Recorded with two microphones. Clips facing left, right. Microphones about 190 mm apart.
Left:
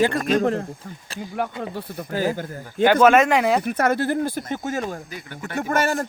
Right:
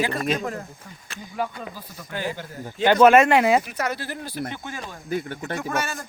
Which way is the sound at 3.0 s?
5° right (ahead or behind).